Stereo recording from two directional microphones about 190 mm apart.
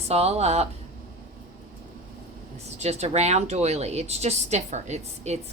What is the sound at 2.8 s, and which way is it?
A woman's voice, 35° right (ahead or behind).